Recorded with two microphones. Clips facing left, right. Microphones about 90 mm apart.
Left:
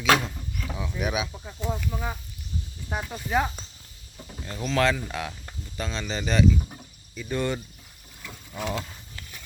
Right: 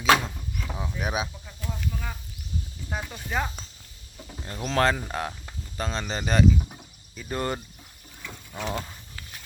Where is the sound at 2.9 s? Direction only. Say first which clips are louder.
Left 4 dB; 10° left (ahead or behind).